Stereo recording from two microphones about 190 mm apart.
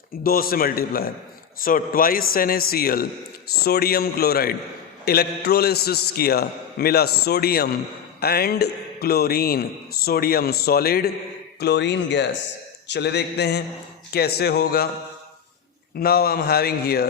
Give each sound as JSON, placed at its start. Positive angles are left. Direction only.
{"t": 0.2, "sound": "a man's voice", "side_deg": 50}
{"t": 11.6, "sound": "a man's voice", "side_deg": 65}
{"t": 16.0, "sound": "a man's voice", "side_deg": 55}